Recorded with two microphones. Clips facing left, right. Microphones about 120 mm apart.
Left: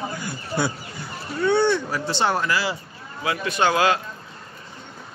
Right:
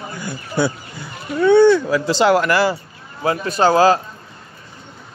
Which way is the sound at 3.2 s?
40° right (ahead or behind).